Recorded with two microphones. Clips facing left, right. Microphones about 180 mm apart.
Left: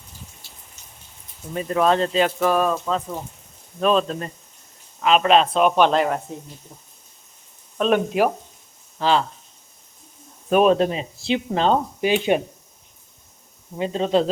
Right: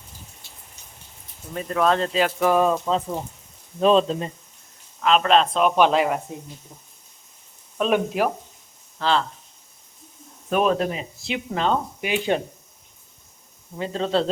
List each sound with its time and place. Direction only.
1.5 s speech: 5° left (ahead or behind)
2.5 s speech: 15° right (ahead or behind)
4.9 s speech: 5° left (ahead or behind)
7.8 s speech: 5° right (ahead or behind)
9.0 s speech: 15° left (ahead or behind)
10.5 s speech: 20° left (ahead or behind)
13.7 s speech: 20° left (ahead or behind)